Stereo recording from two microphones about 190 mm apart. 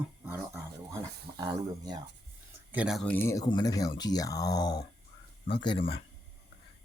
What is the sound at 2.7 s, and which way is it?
Speech, 5° right (ahead or behind).